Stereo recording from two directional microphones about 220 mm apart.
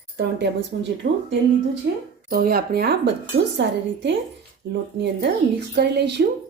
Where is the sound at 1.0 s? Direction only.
40° right (ahead or behind).